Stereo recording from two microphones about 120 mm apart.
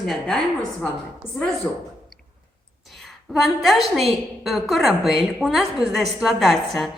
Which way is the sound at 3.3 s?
Centre (ahead or behind).